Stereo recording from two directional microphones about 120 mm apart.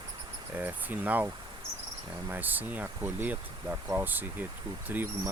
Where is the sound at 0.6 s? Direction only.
15° right (ahead or behind).